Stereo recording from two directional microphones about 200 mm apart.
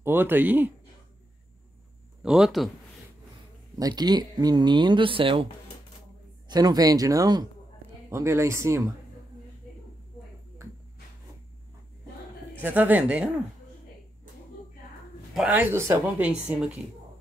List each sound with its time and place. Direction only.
0.0 s speech: 10° right (ahead or behind)
2.2 s a man's voice: 5° right (ahead or behind)
3.7 s speech: 20° right (ahead or behind)
6.5 s speech: 20° right (ahead or behind)
12.6 s speech: 10° right (ahead or behind)
15.3 s speech: 5° right (ahead or behind)